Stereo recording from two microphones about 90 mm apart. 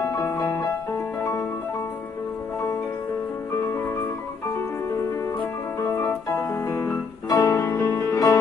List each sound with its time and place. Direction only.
0.0 s music: 35° left (ahead or behind)
0.4 s music: 25° left (ahead or behind)
5.8 s piano: 30° left (ahead or behind)
6.9 s music: 40° left (ahead or behind)